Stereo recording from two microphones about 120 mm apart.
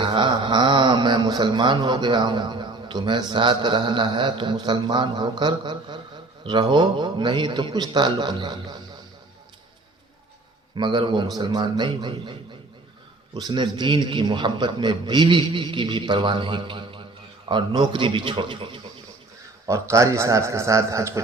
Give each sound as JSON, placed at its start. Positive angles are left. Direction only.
{"t": 0.0, "sound": "a man's voice", "side_deg": -40}
{"t": 10.8, "sound": "a man's voice", "side_deg": -40}
{"t": 13.3, "sound": "a man's voice", "side_deg": -40}
{"t": 19.6, "sound": "a man's voice", "side_deg": -25}